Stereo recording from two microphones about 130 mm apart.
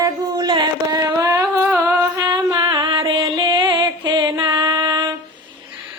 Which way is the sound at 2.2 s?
30° right (ahead or behind).